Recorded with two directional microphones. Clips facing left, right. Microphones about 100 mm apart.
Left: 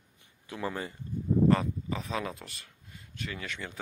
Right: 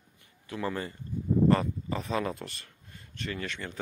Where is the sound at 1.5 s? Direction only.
Centre (ahead or behind).